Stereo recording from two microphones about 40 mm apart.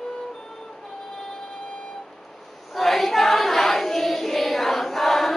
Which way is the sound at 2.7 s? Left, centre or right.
Centre.